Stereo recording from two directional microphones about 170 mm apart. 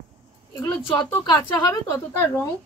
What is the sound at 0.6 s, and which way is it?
A woman's voice, 20° left (ahead or behind).